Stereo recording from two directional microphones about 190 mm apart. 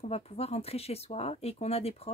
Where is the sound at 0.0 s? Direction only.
35° left (ahead or behind).